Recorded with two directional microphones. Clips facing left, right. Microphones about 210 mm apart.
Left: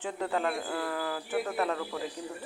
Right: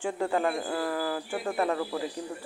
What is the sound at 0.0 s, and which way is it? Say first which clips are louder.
Speech: right 4 dB; 10° right (ahead or behind).